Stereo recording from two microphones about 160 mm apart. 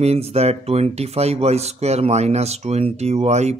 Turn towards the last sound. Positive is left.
turn(degrees=-45)  # may be behind; listen again after turning